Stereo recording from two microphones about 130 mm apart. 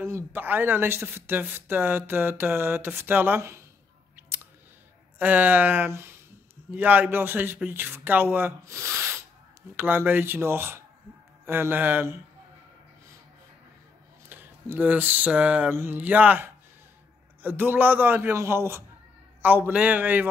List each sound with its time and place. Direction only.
0.0 s speech: 20° right (ahead or behind)
5.2 s speech: 15° right (ahead or behind)
14.3 s speech: 15° right (ahead or behind)